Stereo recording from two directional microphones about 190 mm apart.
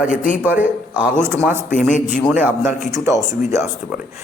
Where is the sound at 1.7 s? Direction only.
40° left (ahead or behind).